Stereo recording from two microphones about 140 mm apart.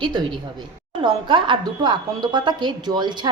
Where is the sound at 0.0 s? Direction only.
35° right (ahead or behind).